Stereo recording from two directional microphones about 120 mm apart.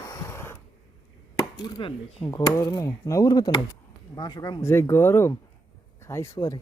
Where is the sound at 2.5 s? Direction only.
25° left (ahead or behind).